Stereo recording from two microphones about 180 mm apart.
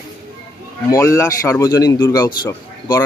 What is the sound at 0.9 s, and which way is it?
A man's voice, 15° left (ahead or behind).